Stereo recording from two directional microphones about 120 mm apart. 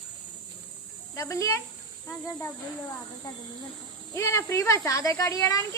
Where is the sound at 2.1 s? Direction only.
25° left (ahead or behind).